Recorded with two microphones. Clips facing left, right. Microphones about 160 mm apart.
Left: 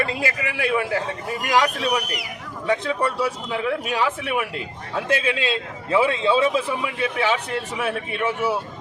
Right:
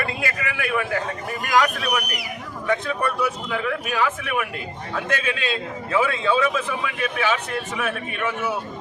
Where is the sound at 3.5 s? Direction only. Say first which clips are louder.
Left 1 dB; 25° left (ahead or behind).